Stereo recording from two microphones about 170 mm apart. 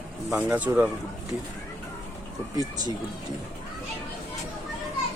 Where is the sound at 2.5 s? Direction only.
20° right (ahead or behind).